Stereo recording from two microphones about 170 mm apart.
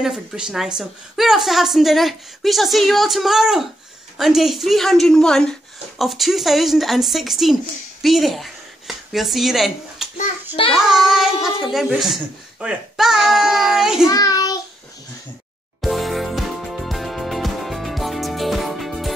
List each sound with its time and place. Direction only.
0.0 s a woman's voice: 5° right (ahead or behind)
14.0 s child singing: 20° left (ahead or behind)
15.8 s music: centre (ahead or behind)